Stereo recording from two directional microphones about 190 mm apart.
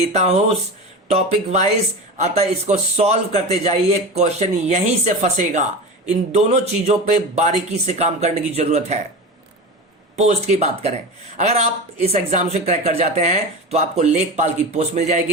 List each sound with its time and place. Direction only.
0.1 s a man's voice: 35° right (ahead or behind)
10.2 s a man's voice: 35° right (ahead or behind)